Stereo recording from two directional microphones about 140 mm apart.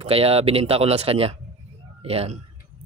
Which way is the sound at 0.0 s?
45° right (ahead or behind).